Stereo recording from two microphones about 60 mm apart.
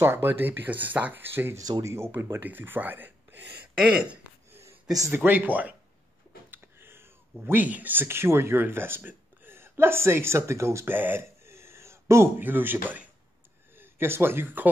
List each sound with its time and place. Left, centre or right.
0.0 s speech: right
0.3 s speech: right
1.7 s speech: right
2.4 s speech: right
3.7 s speech: centre
4.5 s a sound: right
5.1 s speech: right
6.5 s a sound: right
7.4 s speech: right
10.9 s speech: right
11.4 s a sound: right
12.4 s speech: right